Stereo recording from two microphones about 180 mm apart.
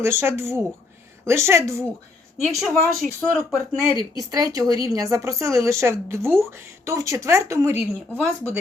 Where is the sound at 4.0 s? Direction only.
20° right (ahead or behind).